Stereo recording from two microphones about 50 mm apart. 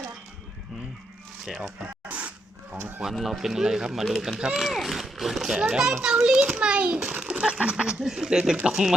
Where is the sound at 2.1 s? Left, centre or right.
Right.